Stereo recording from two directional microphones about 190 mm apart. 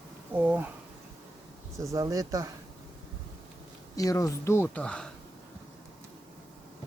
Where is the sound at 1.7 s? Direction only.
15° right (ahead or behind).